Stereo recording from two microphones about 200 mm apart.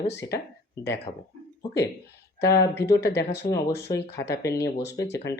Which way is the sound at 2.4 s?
15° left (ahead or behind).